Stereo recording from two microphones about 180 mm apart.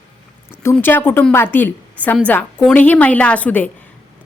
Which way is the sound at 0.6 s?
15° left (ahead or behind).